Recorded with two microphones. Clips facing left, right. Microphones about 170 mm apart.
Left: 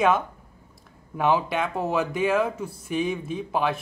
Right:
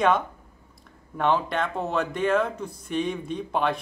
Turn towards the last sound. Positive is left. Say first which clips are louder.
# even
turn(degrees=5)  # may be behind; listen again after turning